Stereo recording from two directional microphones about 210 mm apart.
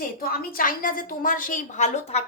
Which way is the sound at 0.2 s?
45° left (ahead or behind).